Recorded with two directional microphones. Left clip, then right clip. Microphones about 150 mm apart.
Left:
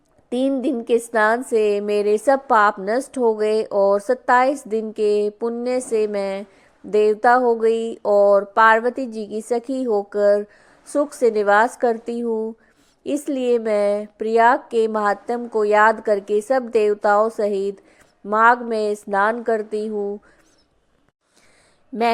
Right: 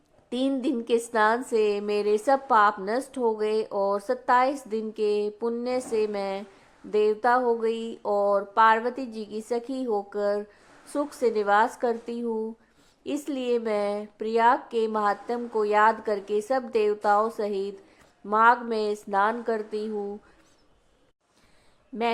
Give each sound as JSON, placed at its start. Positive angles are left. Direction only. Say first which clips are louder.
{"t": 0.3, "sound": "a woman's voice", "louder": "left 6 dB", "side_deg": 25}
{"t": 6.9, "sound": "a sound", "louder": "left 7 dB", "side_deg": 35}
{"t": 18.3, "sound": "a woman's voice", "louder": "left 5 dB", "side_deg": 30}